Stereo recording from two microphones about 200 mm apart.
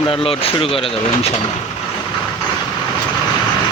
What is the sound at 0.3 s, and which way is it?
Speech, 30° left (ahead or behind).